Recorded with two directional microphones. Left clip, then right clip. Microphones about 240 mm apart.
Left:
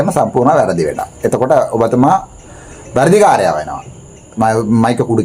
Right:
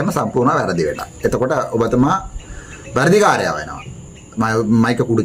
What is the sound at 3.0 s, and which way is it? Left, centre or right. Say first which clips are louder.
Speech: left 4 dB; centre.